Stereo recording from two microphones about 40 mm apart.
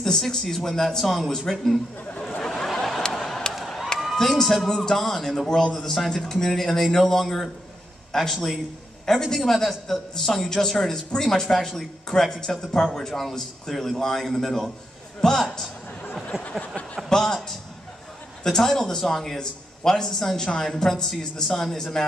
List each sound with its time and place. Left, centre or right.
0.0 s a man's voice: centre
2.4 s a sound: centre
3.1 s vehicle: centre
3.5 s a sound: centre
4.0 s a man's voice: centre
16.7 s speech: left
17.2 s a man's voice: centre